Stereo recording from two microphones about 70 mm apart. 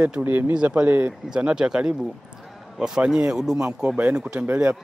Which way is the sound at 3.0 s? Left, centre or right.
Centre.